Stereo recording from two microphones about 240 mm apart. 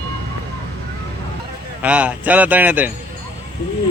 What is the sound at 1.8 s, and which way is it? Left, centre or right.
A man's voice, centre.